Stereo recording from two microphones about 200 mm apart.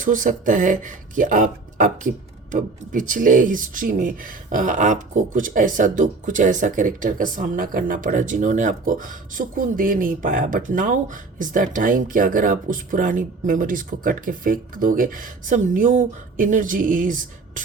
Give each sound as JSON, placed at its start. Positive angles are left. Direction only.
{"t": 0.0, "sound": "speech", "side_deg": -40}